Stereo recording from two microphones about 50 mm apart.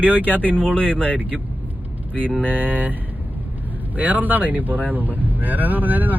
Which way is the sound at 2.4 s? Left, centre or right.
Right.